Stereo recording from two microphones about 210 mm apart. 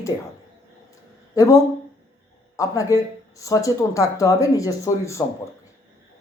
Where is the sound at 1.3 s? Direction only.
15° left (ahead or behind).